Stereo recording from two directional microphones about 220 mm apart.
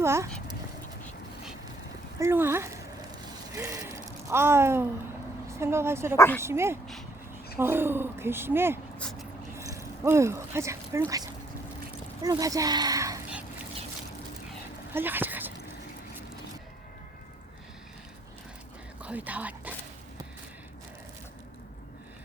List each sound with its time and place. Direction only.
0.0 s speech: 10° right (ahead or behind)
2.1 s speech: 10° right (ahead or behind)
6.1 s speech: 10° left (ahead or behind)
6.4 s speech: 10° right (ahead or behind)
9.0 s a sound: 5° left (ahead or behind)
9.6 s a sound: 15° right (ahead or behind)
12.2 s speech: 15° right (ahead or behind)
14.9 s a sound: 10° right (ahead or behind)
19.0 s speech: 5° right (ahead or behind)